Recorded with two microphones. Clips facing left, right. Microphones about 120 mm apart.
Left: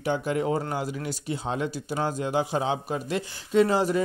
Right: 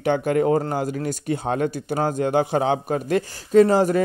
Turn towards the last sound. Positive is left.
turn(degrees=-45)  # may be behind; listen again after turning